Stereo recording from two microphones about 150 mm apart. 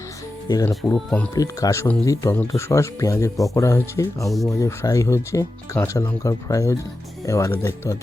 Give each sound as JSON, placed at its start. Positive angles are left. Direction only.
{"t": 0.4, "sound": "speech", "side_deg": 25}
{"t": 0.8, "sound": "speech", "side_deg": 0}
{"t": 1.4, "sound": "speech", "side_deg": 20}